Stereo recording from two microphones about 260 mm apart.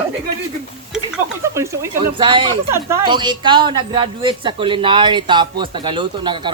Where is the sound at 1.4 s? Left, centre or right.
Centre.